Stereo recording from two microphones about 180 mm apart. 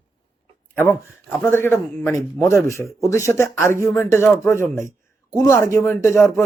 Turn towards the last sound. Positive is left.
turn(degrees=15)  # may be behind; listen again after turning